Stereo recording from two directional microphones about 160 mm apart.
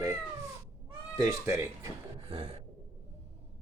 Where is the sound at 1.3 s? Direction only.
20° right (ahead or behind).